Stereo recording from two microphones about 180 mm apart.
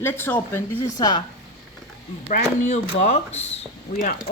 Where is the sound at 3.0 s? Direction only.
40° left (ahead or behind).